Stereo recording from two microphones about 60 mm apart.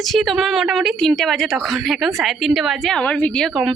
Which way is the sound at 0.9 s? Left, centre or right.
Centre.